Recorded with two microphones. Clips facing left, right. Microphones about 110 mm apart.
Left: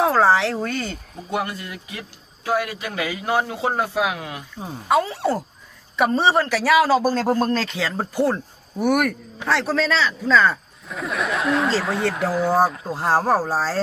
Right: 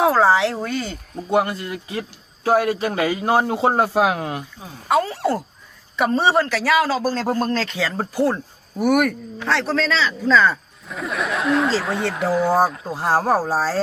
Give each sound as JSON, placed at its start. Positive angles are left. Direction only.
{"t": 0.0, "sound": "a man's voice", "side_deg": -5}
{"t": 1.3, "sound": "a man's voice", "side_deg": -30}
{"t": 6.0, "sound": "a man's voice", "side_deg": 0}